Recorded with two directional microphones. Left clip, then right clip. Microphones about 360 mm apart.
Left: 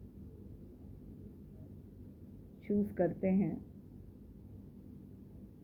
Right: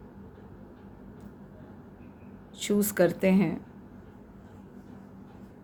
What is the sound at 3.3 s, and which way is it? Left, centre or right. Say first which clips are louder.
Speech: right 9 dB; right.